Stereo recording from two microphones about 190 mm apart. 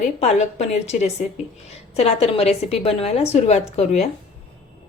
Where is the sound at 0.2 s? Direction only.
35° left (ahead or behind).